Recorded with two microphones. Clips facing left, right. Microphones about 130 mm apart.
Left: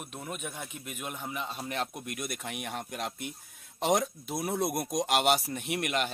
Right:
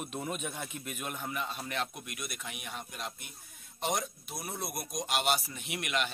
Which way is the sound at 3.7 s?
90° left.